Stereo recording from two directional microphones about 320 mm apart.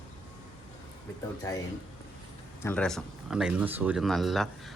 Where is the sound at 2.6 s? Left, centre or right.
Centre.